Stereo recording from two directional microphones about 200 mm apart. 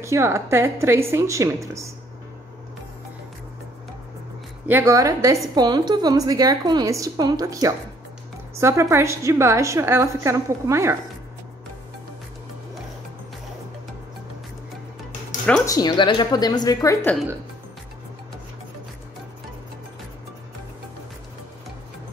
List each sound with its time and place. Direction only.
0.0 s a woman's voice: 15° right (ahead or behind)
4.6 s a woman's voice: 10° right (ahead or behind)
15.4 s speech: 5° left (ahead or behind)
15.7 s a woman's voice: 20° left (ahead or behind)